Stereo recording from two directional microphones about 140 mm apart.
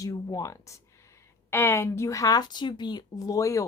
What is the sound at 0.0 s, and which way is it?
A woman's voice, 25° left (ahead or behind).